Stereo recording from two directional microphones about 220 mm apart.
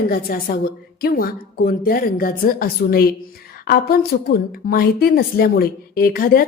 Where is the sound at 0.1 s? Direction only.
40° left (ahead or behind).